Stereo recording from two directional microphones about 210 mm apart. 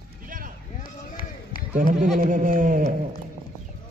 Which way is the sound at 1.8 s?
40° right (ahead or behind).